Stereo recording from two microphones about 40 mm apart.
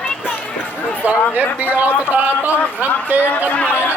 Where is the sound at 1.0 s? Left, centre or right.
Right.